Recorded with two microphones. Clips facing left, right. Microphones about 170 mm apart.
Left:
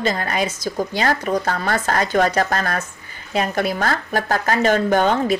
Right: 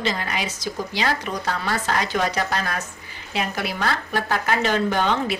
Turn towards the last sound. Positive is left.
turn(degrees=45)  # may be behind; listen again after turning